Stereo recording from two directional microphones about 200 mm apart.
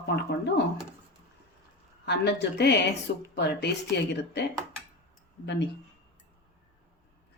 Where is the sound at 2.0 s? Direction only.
60° left (ahead or behind).